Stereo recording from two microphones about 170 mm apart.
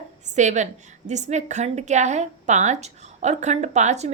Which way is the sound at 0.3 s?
45° right (ahead or behind).